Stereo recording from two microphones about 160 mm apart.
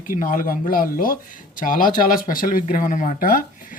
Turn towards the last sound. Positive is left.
turn(degrees=60)  # may be behind; listen again after turning